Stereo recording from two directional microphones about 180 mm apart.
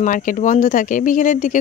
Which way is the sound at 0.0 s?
45° left (ahead or behind).